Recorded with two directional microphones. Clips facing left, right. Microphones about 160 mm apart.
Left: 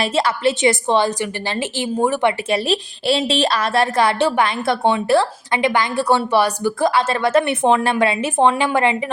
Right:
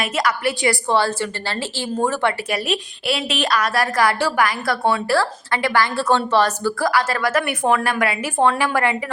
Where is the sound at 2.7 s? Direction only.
30° left (ahead or behind).